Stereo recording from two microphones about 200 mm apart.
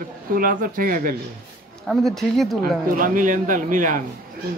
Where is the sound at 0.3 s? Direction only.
45° right (ahead or behind).